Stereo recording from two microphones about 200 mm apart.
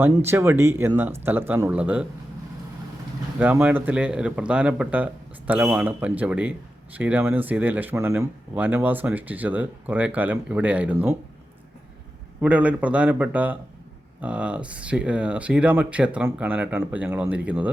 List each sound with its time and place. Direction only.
0.0 s speech: 10° right (ahead or behind)
3.4 s speech: 10° right (ahead or behind)
12.4 s speech: 5° right (ahead or behind)